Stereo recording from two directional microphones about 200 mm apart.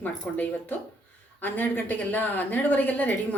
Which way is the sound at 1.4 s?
10° left (ahead or behind).